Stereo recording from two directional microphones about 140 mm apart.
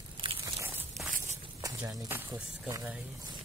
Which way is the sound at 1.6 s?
20° right (ahead or behind).